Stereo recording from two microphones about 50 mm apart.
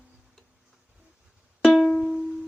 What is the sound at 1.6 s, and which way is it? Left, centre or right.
Music, centre.